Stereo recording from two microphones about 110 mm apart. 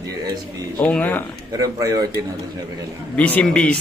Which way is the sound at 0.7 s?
15° left (ahead or behind).